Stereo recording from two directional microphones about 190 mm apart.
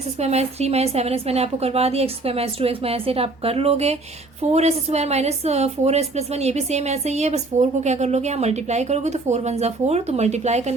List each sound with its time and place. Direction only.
0.2 s speech: 35° right (ahead or behind)